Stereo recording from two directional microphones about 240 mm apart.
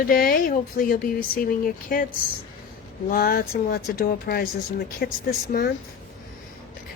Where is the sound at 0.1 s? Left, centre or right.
Left.